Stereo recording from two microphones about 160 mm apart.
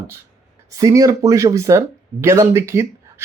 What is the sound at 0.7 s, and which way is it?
Speech, 20° right (ahead or behind).